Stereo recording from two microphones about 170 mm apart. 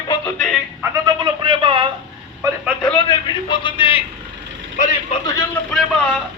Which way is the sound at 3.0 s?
30° left (ahead or behind).